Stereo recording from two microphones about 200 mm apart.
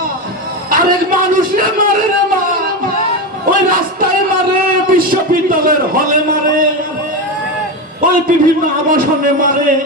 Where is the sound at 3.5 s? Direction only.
45° right (ahead or behind).